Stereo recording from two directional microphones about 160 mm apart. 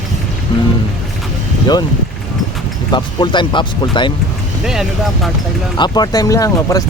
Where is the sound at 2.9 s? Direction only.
30° left (ahead or behind).